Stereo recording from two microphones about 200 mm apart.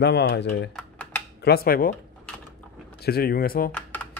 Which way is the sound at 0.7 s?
5° left (ahead or behind).